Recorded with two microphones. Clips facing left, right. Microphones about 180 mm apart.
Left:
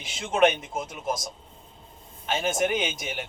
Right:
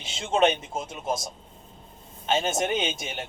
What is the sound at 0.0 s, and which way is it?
Speech, 30° right (ahead or behind).